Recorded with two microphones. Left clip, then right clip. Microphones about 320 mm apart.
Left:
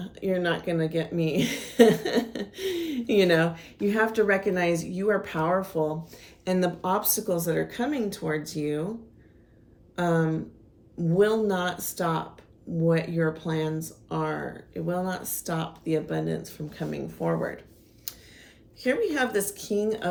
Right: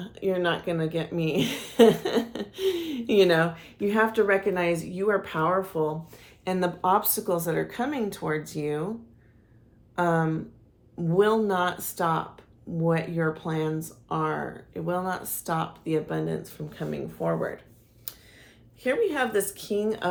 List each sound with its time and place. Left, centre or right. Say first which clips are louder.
0.0 s a woman's voice: right 1 dB; centre
18.9 s a woman's voice: even; centre